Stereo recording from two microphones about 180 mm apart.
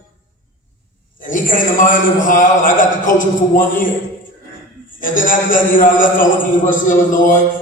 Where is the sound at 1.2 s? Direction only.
50° left (ahead or behind).